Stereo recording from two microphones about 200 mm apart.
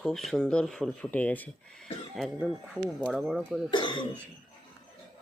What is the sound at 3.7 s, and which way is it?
Speech, 25° left (ahead or behind).